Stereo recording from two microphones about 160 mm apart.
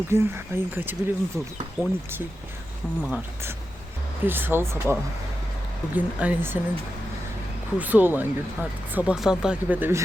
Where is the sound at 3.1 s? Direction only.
10° right (ahead or behind).